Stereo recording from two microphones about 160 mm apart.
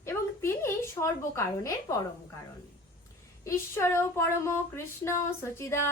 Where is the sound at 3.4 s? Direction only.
15° left (ahead or behind).